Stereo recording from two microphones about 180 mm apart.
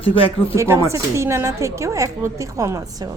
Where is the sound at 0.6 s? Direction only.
15° right (ahead or behind).